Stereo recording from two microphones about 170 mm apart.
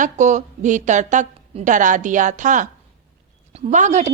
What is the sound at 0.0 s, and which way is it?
A woman's voice, 45° right (ahead or behind).